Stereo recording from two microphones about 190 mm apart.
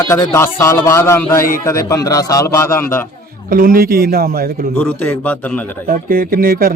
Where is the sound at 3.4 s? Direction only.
50° right (ahead or behind).